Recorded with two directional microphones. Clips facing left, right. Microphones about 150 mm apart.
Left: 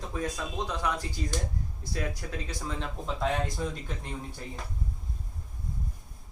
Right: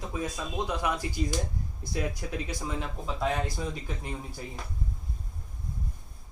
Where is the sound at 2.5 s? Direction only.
10° right (ahead or behind).